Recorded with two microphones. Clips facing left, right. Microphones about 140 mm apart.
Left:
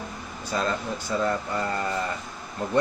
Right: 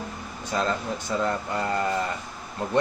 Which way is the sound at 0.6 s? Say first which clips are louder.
Right 1 dB; 20° right (ahead or behind).